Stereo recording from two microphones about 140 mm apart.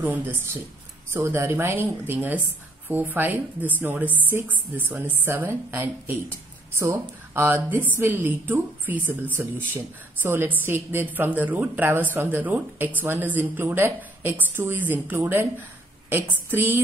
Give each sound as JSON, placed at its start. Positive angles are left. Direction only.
{"t": 0.0, "sound": "a woman's voice", "side_deg": -10}